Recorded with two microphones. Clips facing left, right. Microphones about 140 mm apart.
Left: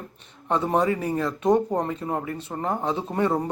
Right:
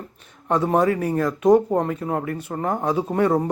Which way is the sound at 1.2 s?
10° right (ahead or behind).